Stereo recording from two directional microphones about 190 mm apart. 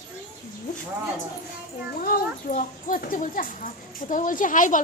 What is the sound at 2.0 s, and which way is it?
A child's voice, 45° left (ahead or behind).